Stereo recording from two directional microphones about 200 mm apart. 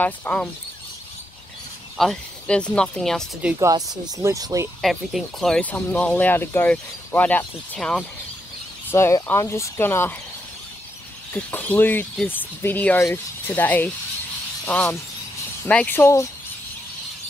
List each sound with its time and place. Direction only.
0.0 s speech: 10° left (ahead or behind)
2.0 s speech: 5° left (ahead or behind)
3.5 s speech: 20° right (ahead or behind)
4.8 s speech: centre (ahead or behind)
11.3 s speech: 10° left (ahead or behind)